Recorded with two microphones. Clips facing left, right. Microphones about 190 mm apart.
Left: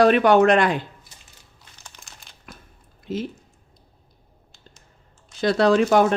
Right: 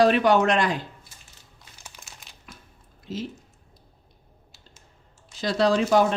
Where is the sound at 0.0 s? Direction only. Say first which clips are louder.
Left 4 dB; 55° left (ahead or behind).